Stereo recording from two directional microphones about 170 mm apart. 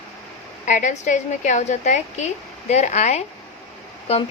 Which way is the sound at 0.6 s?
45° left (ahead or behind).